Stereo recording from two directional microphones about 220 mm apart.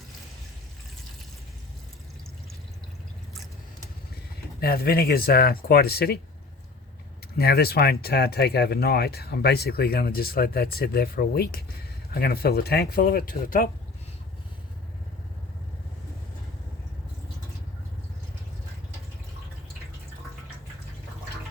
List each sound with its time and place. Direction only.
4.6 s speech: 45° left (ahead or behind)
7.3 s speech: 45° left (ahead or behind)